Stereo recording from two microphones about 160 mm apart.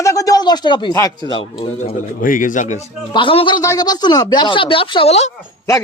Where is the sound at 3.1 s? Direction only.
30° left (ahead or behind).